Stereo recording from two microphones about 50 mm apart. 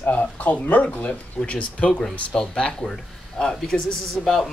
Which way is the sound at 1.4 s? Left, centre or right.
Left.